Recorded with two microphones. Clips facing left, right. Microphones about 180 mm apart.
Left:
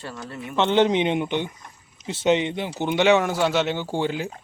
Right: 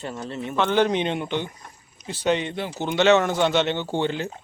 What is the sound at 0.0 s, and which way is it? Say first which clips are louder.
Speech: right 4 dB; 25° right (ahead or behind).